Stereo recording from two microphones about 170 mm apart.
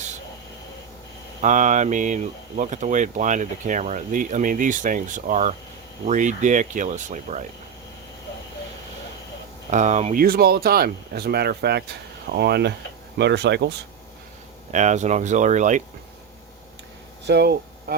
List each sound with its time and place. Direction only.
1.4 s speech: 45° right (ahead or behind)
9.6 s speech: 45° right (ahead or behind)
10.2 s speech: 65° right (ahead or behind)
13.1 s speech: 90° right
14.7 s speech: 45° right (ahead or behind)
17.2 s a sound: 75° right (ahead or behind)